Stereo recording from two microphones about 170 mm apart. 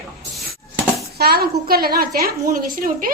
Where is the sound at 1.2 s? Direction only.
65° right (ahead or behind).